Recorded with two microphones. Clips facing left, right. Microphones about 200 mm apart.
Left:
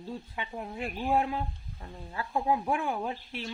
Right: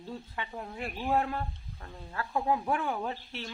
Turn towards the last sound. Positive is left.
turn(degrees=10)  # may be behind; listen again after turning